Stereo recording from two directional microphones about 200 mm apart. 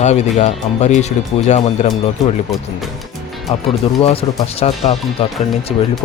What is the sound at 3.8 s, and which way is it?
Speech, 30° left (ahead or behind).